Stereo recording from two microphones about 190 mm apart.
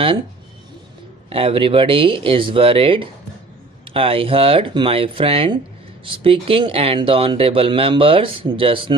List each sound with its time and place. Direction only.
1.3 s speech: 30° right (ahead or behind)